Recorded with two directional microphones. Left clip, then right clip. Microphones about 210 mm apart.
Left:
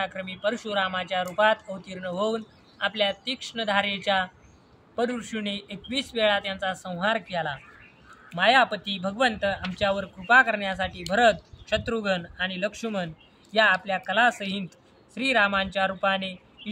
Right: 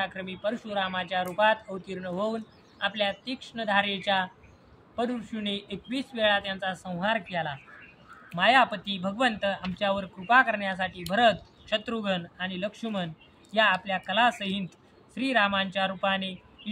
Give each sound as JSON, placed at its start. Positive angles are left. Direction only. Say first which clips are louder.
{"t": 0.0, "sound": "speech", "louder": "left 3 dB", "side_deg": 25}